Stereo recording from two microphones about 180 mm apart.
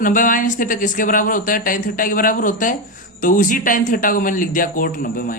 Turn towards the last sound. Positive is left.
turn(degrees=50)  # may be behind; listen again after turning